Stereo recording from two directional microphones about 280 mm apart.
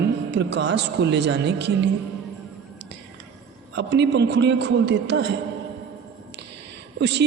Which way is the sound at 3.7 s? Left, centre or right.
Right.